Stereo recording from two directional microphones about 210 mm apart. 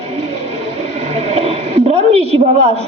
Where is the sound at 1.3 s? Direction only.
30° right (ahead or behind).